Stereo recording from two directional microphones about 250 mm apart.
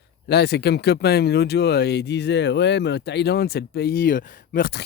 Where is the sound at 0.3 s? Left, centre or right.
Left.